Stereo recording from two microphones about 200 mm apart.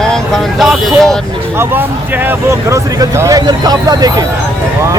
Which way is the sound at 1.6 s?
10° right (ahead or behind).